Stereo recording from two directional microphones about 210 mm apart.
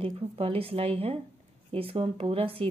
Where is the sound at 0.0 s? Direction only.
25° right (ahead or behind).